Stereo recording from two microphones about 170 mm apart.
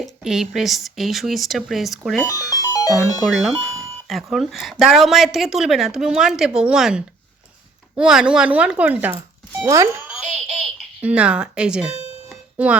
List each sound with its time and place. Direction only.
0.0 s a woman's voice: centre (ahead or behind)
2.2 s speech: 20° left (ahead or behind)
3.2 s a woman's voice: centre (ahead or behind); by 9.9 s 20° right (ahead or behind)
10.1 s giggle: 5° right (ahead or behind)
12.3 s music: 5° right (ahead or behind)